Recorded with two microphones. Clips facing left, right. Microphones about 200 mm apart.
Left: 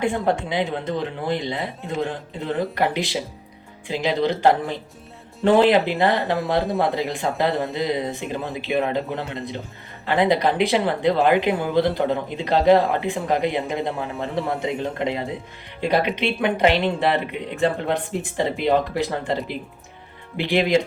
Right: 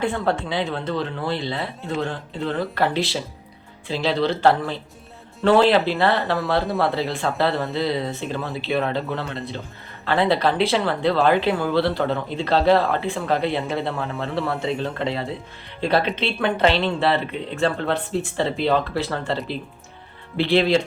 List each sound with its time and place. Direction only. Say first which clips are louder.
0.0 s speech: left 1 dB; 15° left (ahead or behind)